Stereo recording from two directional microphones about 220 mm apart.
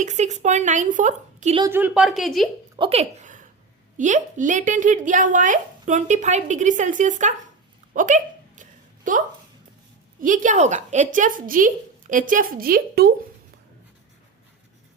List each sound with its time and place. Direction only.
0.0 s speech: 35° right (ahead or behind)
1.5 s a woman's voice: 15° right (ahead or behind)
2.7 s speech: 25° right (ahead or behind)
7.9 s hiccup: 35° right (ahead or behind)
9.1 s speech: 35° right (ahead or behind)